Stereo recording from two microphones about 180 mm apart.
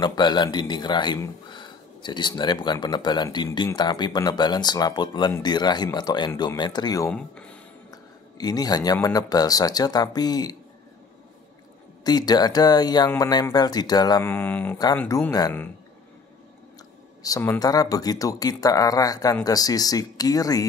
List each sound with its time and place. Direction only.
0.0 s speech: 25° left (ahead or behind)
7.1 s speech: 5° left (ahead or behind)
7.9 s speech: 20° left (ahead or behind)
12.0 s speech: 20° left (ahead or behind)
17.2 s speech: 15° left (ahead or behind)